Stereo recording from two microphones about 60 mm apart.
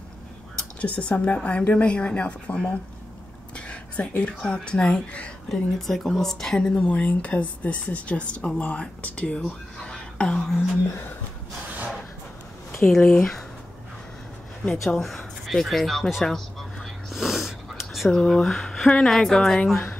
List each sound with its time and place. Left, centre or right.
0.7 s speech: left
3.5 s a sound: centre
4.4 s speech: centre
5.5 s speech: centre
6.9 s speech: left
12.8 s speech: centre
14.9 s a sound: centre
18.1 s speech: centre